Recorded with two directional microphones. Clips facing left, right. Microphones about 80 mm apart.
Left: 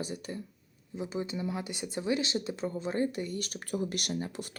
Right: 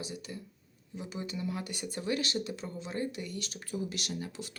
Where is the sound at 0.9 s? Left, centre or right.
Left.